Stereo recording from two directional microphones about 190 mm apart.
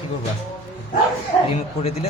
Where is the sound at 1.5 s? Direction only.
35° left (ahead or behind).